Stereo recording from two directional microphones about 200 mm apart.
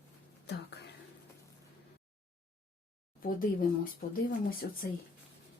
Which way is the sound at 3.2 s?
45° left (ahead or behind).